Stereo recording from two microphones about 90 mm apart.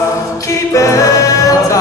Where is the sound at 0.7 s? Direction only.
35° left (ahead or behind).